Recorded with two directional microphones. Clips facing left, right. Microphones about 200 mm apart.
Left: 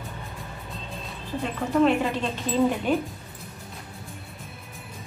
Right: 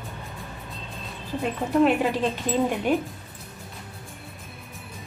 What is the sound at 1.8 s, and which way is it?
Speech, 15° right (ahead or behind).